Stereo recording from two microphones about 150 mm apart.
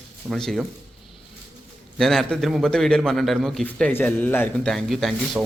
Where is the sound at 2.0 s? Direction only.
Centre (ahead or behind).